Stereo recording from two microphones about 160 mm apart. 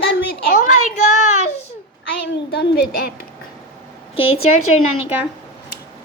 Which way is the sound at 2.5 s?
80° left.